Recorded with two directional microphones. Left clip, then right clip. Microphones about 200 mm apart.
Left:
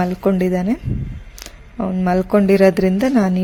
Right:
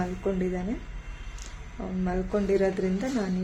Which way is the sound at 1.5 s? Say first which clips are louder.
Left 14 dB; 50° left (ahead or behind).